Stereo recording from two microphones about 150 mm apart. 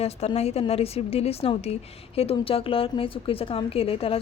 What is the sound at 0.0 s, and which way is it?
A woman's voice, 45° left (ahead or behind).